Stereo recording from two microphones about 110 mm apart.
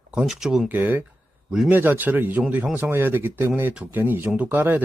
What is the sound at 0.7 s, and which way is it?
Speech, 15° right (ahead or behind).